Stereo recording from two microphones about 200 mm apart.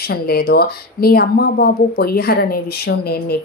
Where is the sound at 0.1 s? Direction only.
50° left (ahead or behind).